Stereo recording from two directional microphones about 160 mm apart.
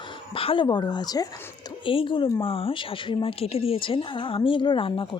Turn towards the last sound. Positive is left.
turn(degrees=35)  # may be behind; listen again after turning